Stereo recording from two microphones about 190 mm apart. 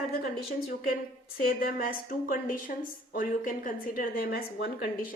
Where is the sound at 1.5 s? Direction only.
50° left (ahead or behind).